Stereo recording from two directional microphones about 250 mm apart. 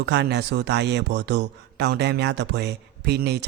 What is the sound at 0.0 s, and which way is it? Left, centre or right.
A man's voice, right.